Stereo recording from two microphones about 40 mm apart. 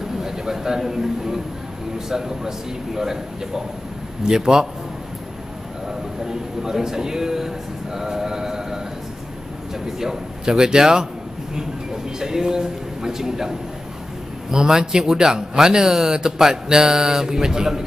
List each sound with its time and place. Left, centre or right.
0.2 s a man's voice: centre
5.9 s speech: centre
9.8 s speech: centre
12.2 s speech: centre